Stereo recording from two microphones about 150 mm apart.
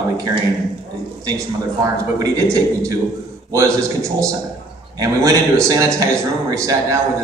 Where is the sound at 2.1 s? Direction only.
20° right (ahead or behind).